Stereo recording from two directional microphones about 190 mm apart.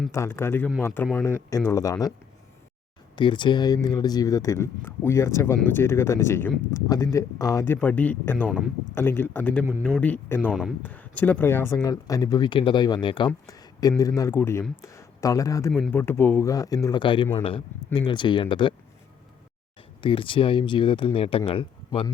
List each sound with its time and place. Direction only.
0.1 s speech: 15° left (ahead or behind)
3.2 s speech: 25° left (ahead or behind)
8.4 s speech: 5° right (ahead or behind)
9.0 s speech: 10° left (ahead or behind)
10.5 s speech: 5° right (ahead or behind)
10.8 s speech: 10° left (ahead or behind); by 18.7 s 25° left (ahead or behind)
20.0 s speech: 25° left (ahead or behind)